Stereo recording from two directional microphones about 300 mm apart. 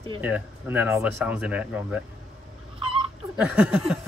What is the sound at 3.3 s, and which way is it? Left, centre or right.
Speech, centre.